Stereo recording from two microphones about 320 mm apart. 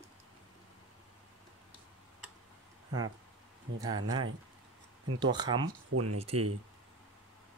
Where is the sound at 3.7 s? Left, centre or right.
Right.